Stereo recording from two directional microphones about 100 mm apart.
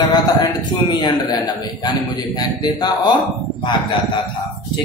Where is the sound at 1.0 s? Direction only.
45° left (ahead or behind).